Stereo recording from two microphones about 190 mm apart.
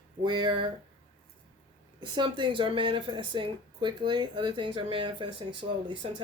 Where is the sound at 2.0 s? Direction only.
25° right (ahead or behind).